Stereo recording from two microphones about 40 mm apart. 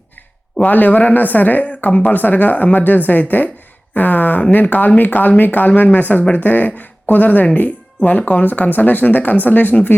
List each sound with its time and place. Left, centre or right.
0.6 s speech: left